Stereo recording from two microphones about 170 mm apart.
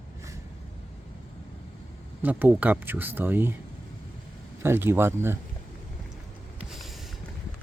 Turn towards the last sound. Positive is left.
turn(degrees=-5)  # may be behind; listen again after turning